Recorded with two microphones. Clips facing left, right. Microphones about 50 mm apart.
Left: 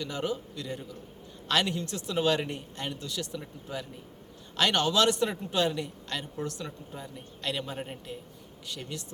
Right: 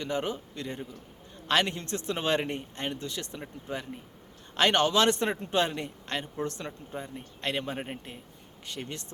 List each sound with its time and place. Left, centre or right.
0.0 s a man's voice: right
8.7 s a man's voice: right